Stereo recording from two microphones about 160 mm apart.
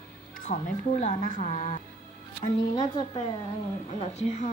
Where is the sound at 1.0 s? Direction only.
55° left (ahead or behind).